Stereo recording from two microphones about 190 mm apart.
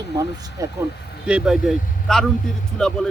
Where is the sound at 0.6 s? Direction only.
15° right (ahead or behind).